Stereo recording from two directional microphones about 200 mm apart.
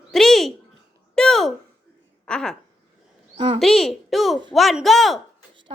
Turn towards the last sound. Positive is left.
turn(degrees=0)  # may be behind; listen again after turning